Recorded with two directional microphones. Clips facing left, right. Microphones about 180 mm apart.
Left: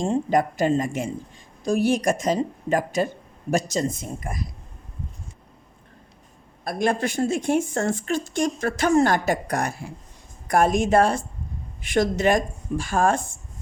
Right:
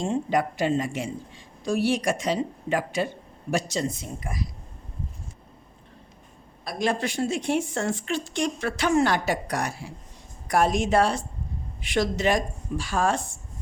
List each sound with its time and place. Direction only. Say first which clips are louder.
0.0 s a woman's voice: left 3 dB; 45° left (ahead or behind)
6.7 s a woman's voice: left 3 dB; 50° left (ahead or behind)